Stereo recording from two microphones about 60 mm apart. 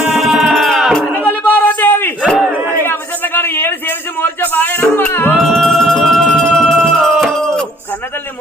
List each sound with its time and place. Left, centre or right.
0.1 s music: centre
1.1 s a sound: left
5.4 s music: centre